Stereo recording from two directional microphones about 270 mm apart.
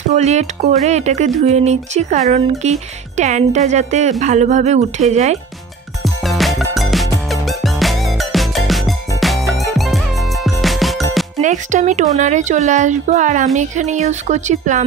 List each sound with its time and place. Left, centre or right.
0.1 s speech: right
6.0 s music: centre
11.4 s speech: right